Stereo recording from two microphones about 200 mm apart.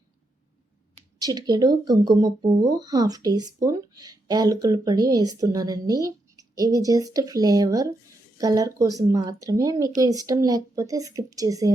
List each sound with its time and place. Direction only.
1.2 s speech: 20° right (ahead or behind)